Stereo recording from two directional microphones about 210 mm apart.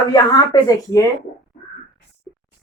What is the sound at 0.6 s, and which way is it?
Speech, 15° left (ahead or behind).